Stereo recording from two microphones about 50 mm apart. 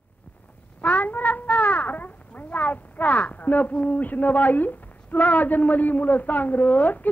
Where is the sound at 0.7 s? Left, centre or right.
Left.